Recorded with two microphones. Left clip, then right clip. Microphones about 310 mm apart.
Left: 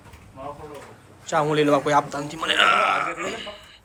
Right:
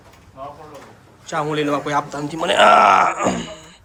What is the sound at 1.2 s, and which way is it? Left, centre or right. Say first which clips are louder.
A man's voice: left 1 dB; centre.